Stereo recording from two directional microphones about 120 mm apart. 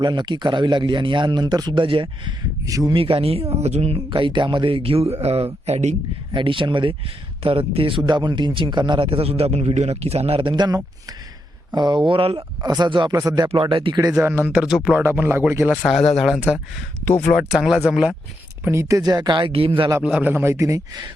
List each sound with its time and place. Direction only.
0.0 s speech: 40° right (ahead or behind)
2.6 s a man's voice: 30° right (ahead or behind)
2.9 s speech: 50° right (ahead or behind); by 6.0 s 65° right (ahead or behind)
6.3 s speech: 45° right (ahead or behind)
12.4 s speech: 35° right (ahead or behind)
13.5 s speech: 45° right (ahead or behind)
14.2 s speech: 20° right (ahead or behind)
15.9 s speech: centre (ahead or behind)
17.1 s speech: 15° left (ahead or behind)
17.3 s speech: 5° right (ahead or behind)
18.6 s speech: 25° right (ahead or behind); by 19.9 s 50° right (ahead or behind)
20.0 s a man's voice: 10° right (ahead or behind); by 21.0 s 25° right (ahead or behind)